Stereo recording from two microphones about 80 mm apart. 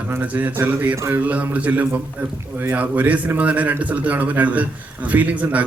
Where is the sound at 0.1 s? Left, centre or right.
Centre.